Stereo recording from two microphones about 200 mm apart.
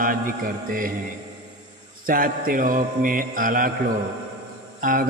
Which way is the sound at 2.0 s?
45° right (ahead or behind).